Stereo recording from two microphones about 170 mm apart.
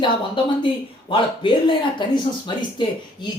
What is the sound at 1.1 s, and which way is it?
Speech, 30° left (ahead or behind).